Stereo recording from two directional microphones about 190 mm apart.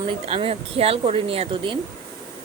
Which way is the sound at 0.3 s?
30° right (ahead or behind).